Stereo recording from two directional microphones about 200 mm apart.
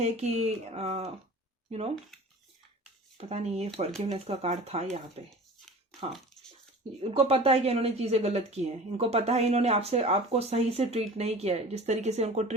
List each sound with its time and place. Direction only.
0.0 s speech: 35° right (ahead or behind)
3.2 s speech: 30° right (ahead or behind)
7.0 s speech: 30° right (ahead or behind)